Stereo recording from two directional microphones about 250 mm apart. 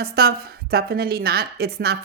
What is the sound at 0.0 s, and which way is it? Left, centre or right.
A woman's voice, right.